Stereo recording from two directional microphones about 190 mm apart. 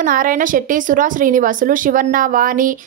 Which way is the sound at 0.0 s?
45° right (ahead or behind).